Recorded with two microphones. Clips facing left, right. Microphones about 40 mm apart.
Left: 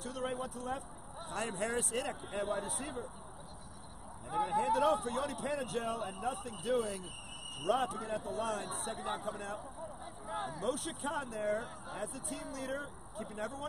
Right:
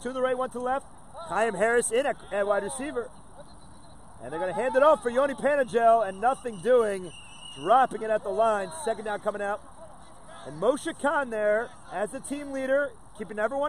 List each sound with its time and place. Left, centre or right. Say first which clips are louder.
0.0 s speech: right 11 dB; right
4.6 s speech: right 10 dB; right
8.8 s speech: right 10 dB; right
9.2 s speech: right 11 dB; right
10.2 s a sound: left 3 dB; centre
10.6 s speech: right 16 dB; right